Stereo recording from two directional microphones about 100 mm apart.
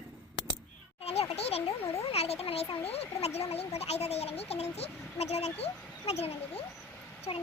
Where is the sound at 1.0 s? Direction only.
90° left.